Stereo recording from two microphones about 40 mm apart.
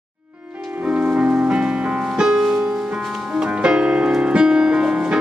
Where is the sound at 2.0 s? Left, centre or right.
Centre.